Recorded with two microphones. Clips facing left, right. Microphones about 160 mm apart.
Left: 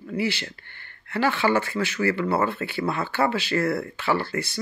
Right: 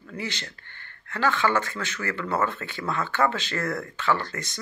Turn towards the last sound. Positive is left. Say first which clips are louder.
# left 2 dB
turn(degrees=10)  # may be behind; listen again after turning